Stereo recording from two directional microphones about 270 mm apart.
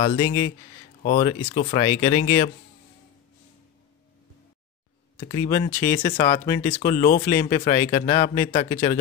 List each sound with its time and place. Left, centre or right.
0.0 s speech: centre
5.3 s speech: centre
6.7 s speech: left
7.2 s speech: centre
7.9 s speech: left